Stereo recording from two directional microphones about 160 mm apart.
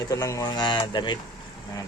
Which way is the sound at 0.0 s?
20° left (ahead or behind).